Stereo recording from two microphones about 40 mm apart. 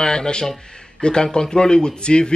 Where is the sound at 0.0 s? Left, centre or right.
Centre.